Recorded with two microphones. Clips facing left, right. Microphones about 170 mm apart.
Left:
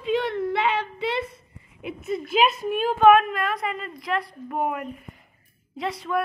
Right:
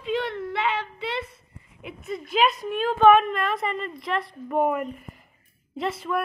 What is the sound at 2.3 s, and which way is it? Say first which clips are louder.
A woman's voice: left 1 dB; 5° left (ahead or behind).